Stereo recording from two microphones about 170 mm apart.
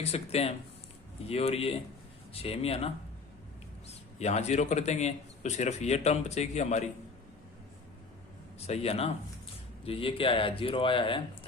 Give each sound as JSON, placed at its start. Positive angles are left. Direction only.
{"t": 0.0, "sound": "a man's voice", "side_deg": 35}
{"t": 4.2, "sound": "a man's voice", "side_deg": 40}
{"t": 8.5, "sound": "a man's voice", "side_deg": 40}